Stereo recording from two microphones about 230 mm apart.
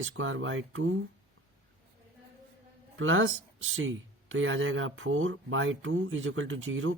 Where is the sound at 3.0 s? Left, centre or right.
Right.